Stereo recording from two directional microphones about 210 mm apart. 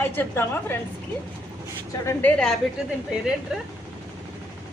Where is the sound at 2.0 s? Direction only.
5° left (ahead or behind).